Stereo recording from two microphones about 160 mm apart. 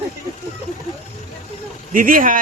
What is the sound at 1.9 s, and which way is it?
Speech, 60° right (ahead or behind).